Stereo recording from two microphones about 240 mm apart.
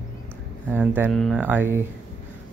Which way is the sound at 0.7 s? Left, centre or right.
Centre.